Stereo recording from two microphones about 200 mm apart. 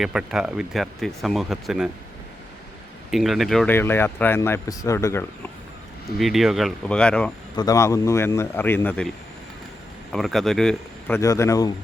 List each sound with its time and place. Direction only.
0.0 s speech: 5° right (ahead or behind)
3.1 s speech: centre (ahead or behind)
6.1 s speech: centre (ahead or behind)
7.5 s speech: 20° left (ahead or behind)
10.1 s speech: centre (ahead or behind)
11.2 s speech: 15° left (ahead or behind)